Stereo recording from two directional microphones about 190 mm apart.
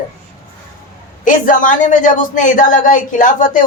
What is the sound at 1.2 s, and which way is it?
A woman's voice, 45° left (ahead or behind).